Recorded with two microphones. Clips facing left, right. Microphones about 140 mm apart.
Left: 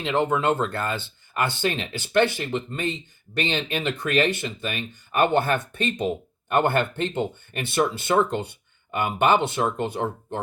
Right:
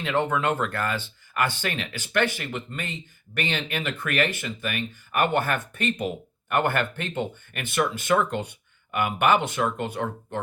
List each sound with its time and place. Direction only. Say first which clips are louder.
0.0 s speech: left 2 dB; 25° left (ahead or behind)